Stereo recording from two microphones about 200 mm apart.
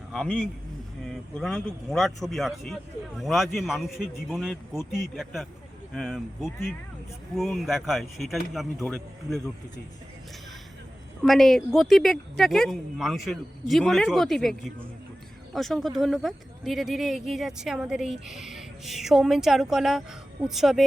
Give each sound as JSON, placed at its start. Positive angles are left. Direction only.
{"t": 0.1, "sound": "a man's voice", "side_deg": 0}
{"t": 11.2, "sound": "speech", "side_deg": 0}